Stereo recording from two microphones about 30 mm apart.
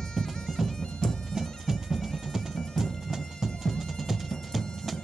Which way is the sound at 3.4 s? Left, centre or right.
Centre.